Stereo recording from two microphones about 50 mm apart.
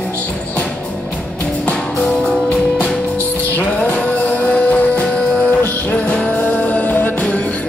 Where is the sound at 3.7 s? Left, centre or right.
Left.